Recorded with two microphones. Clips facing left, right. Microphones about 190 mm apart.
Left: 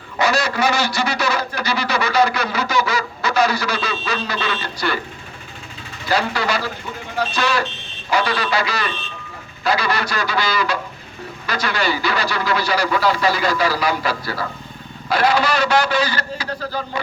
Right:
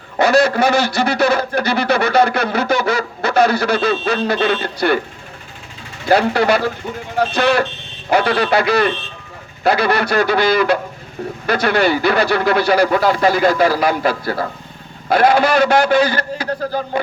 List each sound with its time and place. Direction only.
0.2 s speech: 55° right (ahead or behind)
6.1 s a man's voice: 55° right (ahead or behind)